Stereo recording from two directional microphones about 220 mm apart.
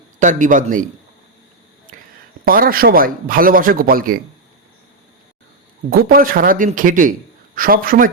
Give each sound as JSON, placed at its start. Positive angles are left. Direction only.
{"t": 0.2, "sound": "speech", "side_deg": -35}
{"t": 2.4, "sound": "speech", "side_deg": -40}
{"t": 5.9, "sound": "speech", "side_deg": -45}